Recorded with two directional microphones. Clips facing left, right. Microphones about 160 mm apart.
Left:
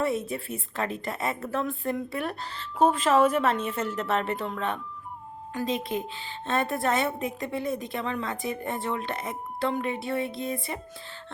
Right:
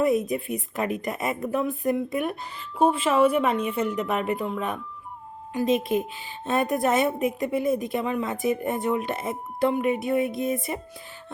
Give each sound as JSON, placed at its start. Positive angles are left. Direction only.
{"t": 0.0, "sound": "a woman's voice", "side_deg": -15}
{"t": 5.5, "sound": "a woman's voice", "side_deg": -20}